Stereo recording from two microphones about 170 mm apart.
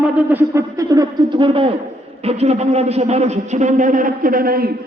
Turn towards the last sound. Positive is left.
turn(degrees=-60)  # may be behind; listen again after turning